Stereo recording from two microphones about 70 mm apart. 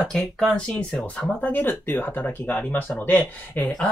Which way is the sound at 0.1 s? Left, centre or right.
Centre.